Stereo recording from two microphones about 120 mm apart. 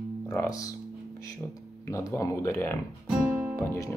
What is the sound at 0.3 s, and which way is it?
Speech, 25° left (ahead or behind).